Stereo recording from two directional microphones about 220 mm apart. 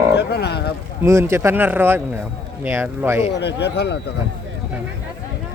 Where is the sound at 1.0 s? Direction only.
10° right (ahead or behind).